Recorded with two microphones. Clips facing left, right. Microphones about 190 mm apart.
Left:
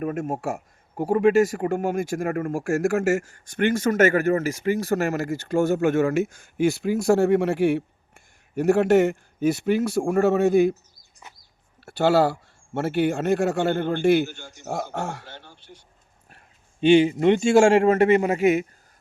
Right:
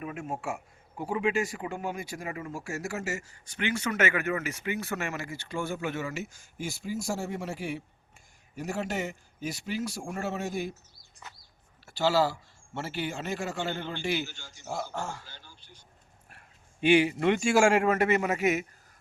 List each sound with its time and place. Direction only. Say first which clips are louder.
0.0 s a man's voice: left 9 dB; 45° left (ahead or behind)
11.9 s a man's voice: left 7 dB; 55° left (ahead or behind)
16.8 s a man's voice: left 7 dB; 25° left (ahead or behind)